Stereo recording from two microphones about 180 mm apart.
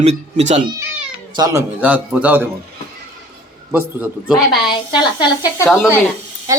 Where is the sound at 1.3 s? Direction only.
20° right (ahead or behind).